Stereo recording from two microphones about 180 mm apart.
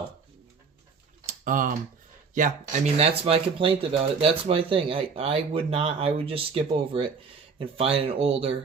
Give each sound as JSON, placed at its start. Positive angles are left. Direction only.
{"t": 1.3, "sound": "typing", "side_deg": -45}
{"t": 2.3, "sound": "speech", "side_deg": -40}